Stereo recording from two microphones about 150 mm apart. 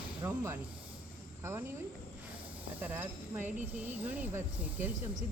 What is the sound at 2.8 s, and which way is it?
Speech, 15° right (ahead or behind).